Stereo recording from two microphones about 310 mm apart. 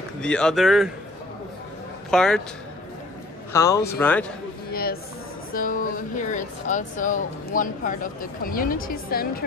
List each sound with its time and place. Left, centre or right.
0.2 s speech: centre
2.0 s a man's voice: centre
3.5 s speech: centre
4.6 s a sound: left
5.5 s speech: left